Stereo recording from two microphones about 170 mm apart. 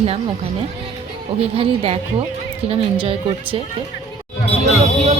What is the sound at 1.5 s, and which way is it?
Speech, 35° right (ahead or behind).